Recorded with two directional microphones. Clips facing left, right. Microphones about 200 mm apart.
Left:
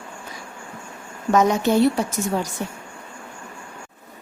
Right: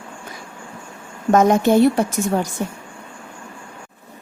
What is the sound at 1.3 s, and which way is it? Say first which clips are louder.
Speech: right 4 dB; 50° right (ahead or behind).